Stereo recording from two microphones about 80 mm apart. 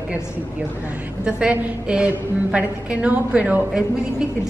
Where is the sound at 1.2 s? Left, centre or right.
Centre.